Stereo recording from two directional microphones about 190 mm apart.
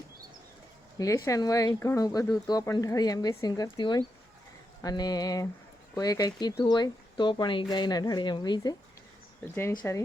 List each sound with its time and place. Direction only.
0.9 s speech: 15° left (ahead or behind)
9.8 s speech: 10° left (ahead or behind)